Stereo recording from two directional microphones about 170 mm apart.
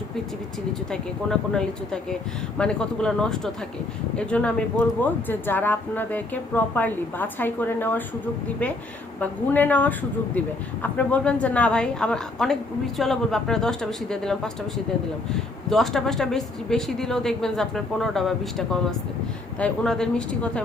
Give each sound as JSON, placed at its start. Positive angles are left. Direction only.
{"t": 0.9, "sound": "a woman's voice", "side_deg": 5}
{"t": 9.2, "sound": "a woman's voice", "side_deg": 10}
{"t": 15.7, "sound": "a woman's voice", "side_deg": 0}